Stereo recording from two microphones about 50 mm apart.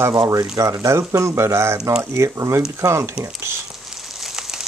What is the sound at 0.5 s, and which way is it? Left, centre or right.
Speech, right.